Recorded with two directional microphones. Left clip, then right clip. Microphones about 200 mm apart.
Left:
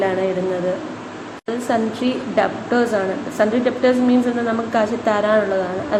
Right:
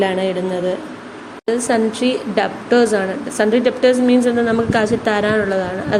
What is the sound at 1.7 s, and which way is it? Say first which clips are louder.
A woman's voice: right 1 dB; 35° right (ahead or behind).